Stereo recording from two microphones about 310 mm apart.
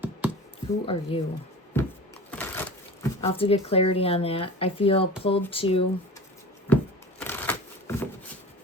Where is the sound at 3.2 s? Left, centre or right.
Centre.